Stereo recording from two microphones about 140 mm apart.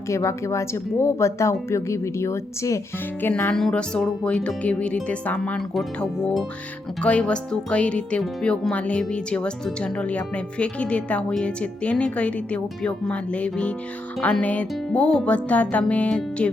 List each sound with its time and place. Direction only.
0.1 s speech: 20° left (ahead or behind)